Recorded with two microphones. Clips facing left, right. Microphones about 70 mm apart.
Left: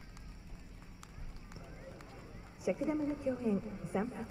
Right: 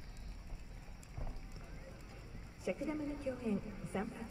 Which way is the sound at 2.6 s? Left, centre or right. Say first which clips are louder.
Left 5 dB; centre.